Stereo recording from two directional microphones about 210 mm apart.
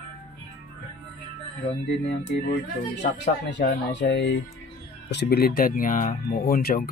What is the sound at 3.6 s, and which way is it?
Speech, 55° left (ahead or behind).